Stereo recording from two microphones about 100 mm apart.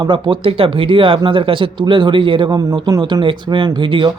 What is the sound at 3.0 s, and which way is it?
Speech, 50° right (ahead or behind).